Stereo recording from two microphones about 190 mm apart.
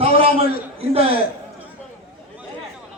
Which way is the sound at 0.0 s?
30° right (ahead or behind).